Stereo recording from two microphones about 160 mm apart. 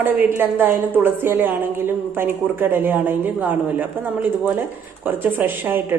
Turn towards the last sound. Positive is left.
turn(degrees=-15)  # may be behind; listen again after turning